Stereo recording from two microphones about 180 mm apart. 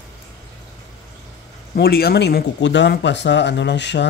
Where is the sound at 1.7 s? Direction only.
60° left (ahead or behind).